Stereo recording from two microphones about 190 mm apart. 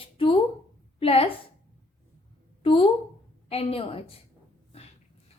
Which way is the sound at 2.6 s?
30° left (ahead or behind).